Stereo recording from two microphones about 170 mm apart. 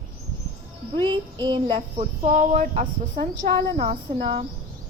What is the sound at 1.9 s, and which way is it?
Speech, 45° right (ahead or behind).